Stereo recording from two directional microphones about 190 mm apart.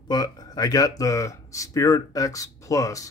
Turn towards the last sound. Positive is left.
turn(degrees=15)  # may be behind; listen again after turning